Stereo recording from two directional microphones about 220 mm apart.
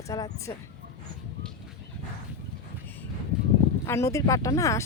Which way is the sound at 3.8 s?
10° left (ahead or behind).